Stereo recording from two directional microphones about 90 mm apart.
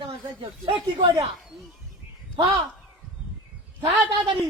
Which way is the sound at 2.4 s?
70° right (ahead or behind).